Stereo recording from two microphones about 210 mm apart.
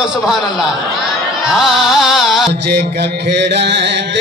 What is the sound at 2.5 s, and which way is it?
Music, 55° right (ahead or behind).